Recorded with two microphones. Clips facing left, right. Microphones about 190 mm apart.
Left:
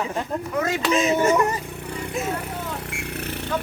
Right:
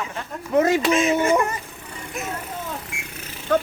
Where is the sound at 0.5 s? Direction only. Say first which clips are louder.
Right 8 dB; 20° right (ahead or behind).